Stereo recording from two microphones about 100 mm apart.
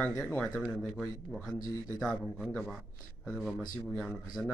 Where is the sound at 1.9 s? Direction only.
5° left (ahead or behind).